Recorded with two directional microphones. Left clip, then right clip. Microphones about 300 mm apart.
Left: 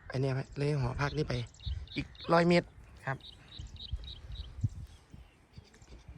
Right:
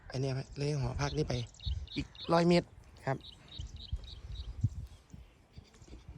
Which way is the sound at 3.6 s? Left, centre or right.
Centre.